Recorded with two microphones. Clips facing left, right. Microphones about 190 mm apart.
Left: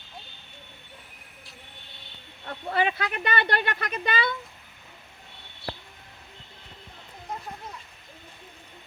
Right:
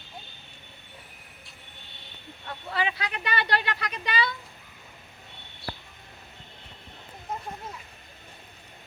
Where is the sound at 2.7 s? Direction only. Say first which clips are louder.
Left 4 dB; 50° left (ahead or behind).